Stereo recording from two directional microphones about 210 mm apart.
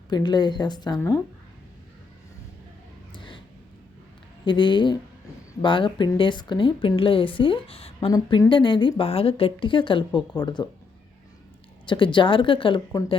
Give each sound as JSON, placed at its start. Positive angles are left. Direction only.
{"t": 0.1, "sound": "speech", "side_deg": 20}
{"t": 3.1, "sound": "a sound", "side_deg": 25}
{"t": 4.4, "sound": "speech", "side_deg": 20}
{"t": 11.9, "sound": "speech", "side_deg": 25}